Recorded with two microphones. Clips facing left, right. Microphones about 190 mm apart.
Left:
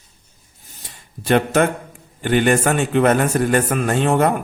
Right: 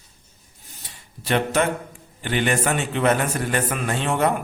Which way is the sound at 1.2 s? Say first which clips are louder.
Left 5 dB; 50° left (ahead or behind).